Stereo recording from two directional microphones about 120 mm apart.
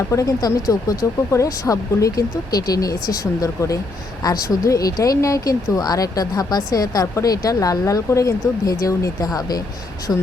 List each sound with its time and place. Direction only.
0.1 s speech: 30° left (ahead or behind)
10.1 s speech: 20° left (ahead or behind)